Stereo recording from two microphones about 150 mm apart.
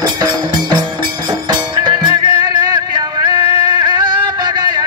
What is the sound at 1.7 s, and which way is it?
Music, 30° right (ahead or behind).